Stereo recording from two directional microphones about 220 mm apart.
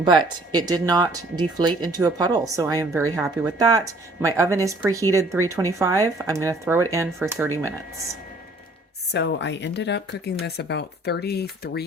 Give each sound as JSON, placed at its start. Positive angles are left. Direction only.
{"t": 0.0, "sound": "speech", "side_deg": -20}
{"t": 3.2, "sound": "speech", "side_deg": -5}
{"t": 3.6, "sound": "speech", "side_deg": -15}
{"t": 9.1, "sound": "speech", "side_deg": 50}